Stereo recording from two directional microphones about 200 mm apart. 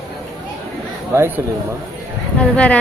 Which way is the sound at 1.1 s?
10° right (ahead or behind).